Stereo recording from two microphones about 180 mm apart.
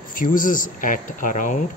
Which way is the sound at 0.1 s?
50° left (ahead or behind).